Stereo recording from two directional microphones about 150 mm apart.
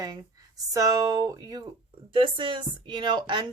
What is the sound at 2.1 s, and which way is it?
A woman's voice, 35° right (ahead or behind).